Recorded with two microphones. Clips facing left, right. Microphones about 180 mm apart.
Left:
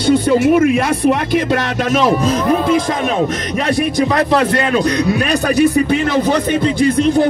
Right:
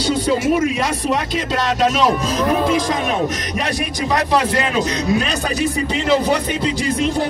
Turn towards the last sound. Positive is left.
turn(degrees=60)  # may be behind; listen again after turning